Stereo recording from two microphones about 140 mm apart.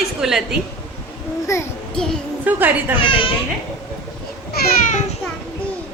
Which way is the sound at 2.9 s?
40° left (ahead or behind).